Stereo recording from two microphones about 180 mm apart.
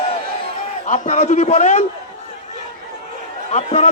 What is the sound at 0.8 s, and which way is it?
Speech, 40° left (ahead or behind).